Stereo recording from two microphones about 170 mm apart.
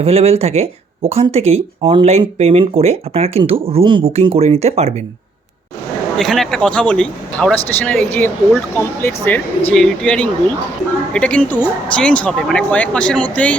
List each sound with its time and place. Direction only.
0.0 s speech: 35° right (ahead or behind)
6.1 s speech: centre (ahead or behind)